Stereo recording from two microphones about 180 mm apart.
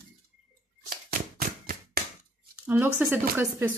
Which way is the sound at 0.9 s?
50° right (ahead or behind).